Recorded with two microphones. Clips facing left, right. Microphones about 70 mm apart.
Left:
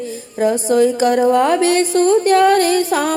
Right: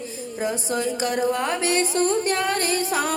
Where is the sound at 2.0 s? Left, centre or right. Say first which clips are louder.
Left 10 dB; left.